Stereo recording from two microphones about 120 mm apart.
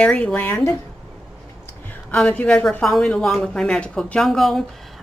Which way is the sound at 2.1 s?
5° left (ahead or behind).